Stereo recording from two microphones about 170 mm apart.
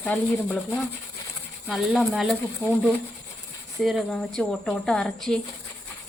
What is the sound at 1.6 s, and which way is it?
Speech, 5° right (ahead or behind).